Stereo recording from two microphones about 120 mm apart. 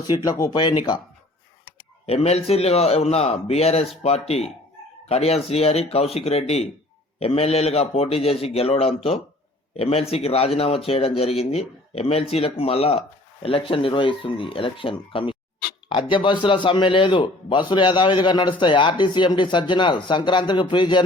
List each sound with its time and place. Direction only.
0.3 s a man's voice: 35° left (ahead or behind)
2.0 s a man's voice: 60° left (ahead or behind); by 21.0 s 40° left (ahead or behind)